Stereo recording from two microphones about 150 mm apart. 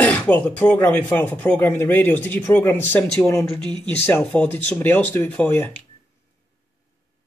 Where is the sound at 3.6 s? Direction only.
30° right (ahead or behind).